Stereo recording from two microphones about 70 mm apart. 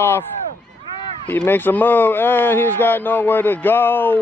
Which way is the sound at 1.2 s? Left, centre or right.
Left.